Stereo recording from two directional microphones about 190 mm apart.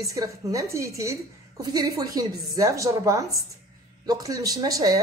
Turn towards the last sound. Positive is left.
turn(degrees=-20)  # may be behind; listen again after turning